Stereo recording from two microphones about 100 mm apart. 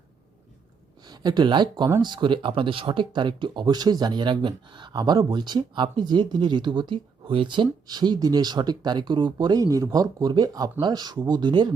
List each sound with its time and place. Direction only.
1.0 s speech: 45° right (ahead or behind)